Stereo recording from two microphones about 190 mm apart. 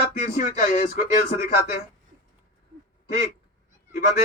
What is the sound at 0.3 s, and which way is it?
Speech, 40° left (ahead or behind).